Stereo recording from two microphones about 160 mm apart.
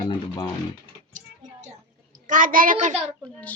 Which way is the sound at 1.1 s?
50° right (ahead or behind).